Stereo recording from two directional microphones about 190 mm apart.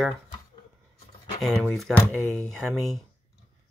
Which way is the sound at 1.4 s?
Centre (ahead or behind).